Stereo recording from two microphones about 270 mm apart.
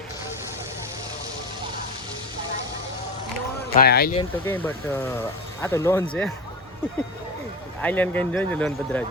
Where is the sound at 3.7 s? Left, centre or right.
Left.